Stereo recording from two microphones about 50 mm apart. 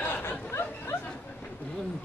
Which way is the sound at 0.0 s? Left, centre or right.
Left.